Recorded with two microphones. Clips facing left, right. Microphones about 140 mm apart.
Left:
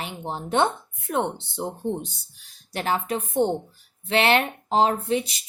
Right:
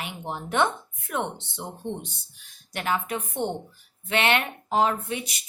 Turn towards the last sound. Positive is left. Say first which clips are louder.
# left 7 dB
turn(degrees=30)  # may be behind; listen again after turning